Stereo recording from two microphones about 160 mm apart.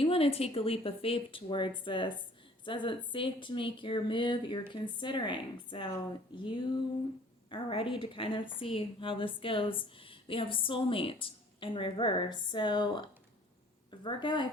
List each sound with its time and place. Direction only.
0.0 s a woman's voice: 35° left (ahead or behind)